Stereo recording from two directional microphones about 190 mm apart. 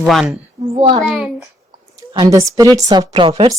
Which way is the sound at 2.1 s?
20° right (ahead or behind).